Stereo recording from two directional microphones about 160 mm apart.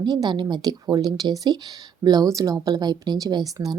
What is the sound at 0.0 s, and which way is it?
A woman's voice, 25° right (ahead or behind).